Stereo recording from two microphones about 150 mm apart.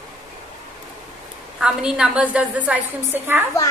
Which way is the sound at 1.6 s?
5° right (ahead or behind).